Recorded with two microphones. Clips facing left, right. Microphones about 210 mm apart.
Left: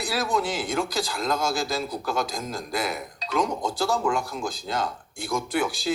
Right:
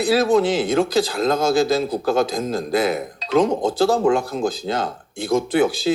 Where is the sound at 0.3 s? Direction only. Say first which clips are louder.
Right 9 dB; 25° right (ahead or behind).